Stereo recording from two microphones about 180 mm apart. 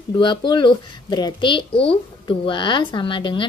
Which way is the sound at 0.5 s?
25° left (ahead or behind).